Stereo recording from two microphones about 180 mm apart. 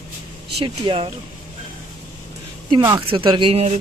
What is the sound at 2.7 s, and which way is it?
Speech, 25° right (ahead or behind).